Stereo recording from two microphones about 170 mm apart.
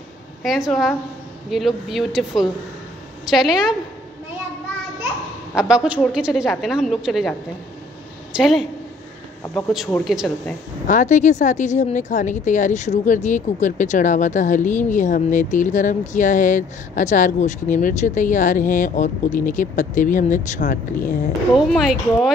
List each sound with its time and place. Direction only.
0.4 s a woman's voice: centre (ahead or behind)
5.6 s a woman's voice: 5° right (ahead or behind)
8.4 s a woman's voice: centre (ahead or behind)
10.0 s a woman's voice: centre (ahead or behind)
10.9 s speech: 45° left (ahead or behind)
21.5 s a woman's voice: centre (ahead or behind)